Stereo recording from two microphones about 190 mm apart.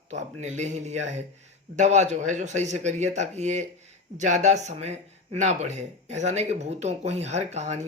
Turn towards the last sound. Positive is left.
turn(degrees=-35)  # may be behind; listen again after turning